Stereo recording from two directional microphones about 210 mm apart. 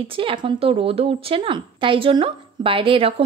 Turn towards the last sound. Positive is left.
turn(degrees=-25)  # may be behind; listen again after turning